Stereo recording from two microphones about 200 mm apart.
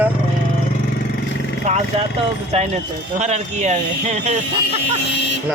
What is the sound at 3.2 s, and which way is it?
Speech, 35° right (ahead or behind).